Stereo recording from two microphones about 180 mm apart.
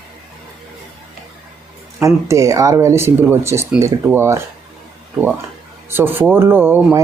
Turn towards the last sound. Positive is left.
turn(degrees=-10)  # may be behind; listen again after turning